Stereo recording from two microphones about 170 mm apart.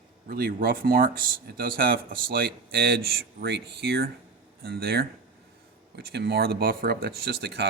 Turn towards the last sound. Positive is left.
turn(degrees=-70)  # may be behind; listen again after turning